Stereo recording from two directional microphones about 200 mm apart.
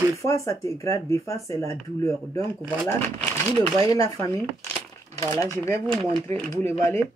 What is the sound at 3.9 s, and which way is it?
Speech, 15° left (ahead or behind).